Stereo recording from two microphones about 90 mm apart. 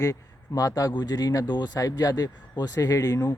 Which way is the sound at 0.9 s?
50° left (ahead or behind).